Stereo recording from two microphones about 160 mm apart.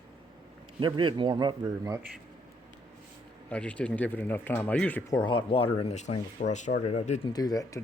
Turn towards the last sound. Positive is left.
turn(degrees=25)  # may be behind; listen again after turning